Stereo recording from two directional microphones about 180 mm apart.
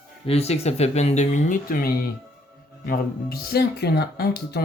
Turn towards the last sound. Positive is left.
turn(degrees=60)  # may be behind; listen again after turning